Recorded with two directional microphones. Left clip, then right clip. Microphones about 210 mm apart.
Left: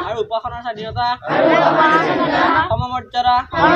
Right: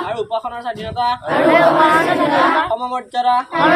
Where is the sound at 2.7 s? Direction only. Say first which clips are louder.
Even; 5° right (ahead or behind).